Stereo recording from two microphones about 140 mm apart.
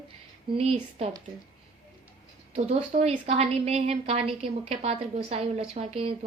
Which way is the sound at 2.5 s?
50° right (ahead or behind).